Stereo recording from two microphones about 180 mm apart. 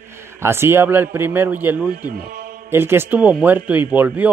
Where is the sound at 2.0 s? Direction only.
50° right (ahead or behind).